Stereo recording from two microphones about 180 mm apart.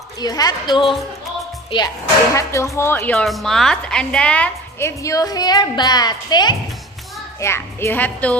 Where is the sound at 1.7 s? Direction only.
25° left (ahead or behind).